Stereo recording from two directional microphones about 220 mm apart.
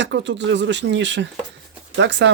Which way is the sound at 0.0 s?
55° right (ahead or behind).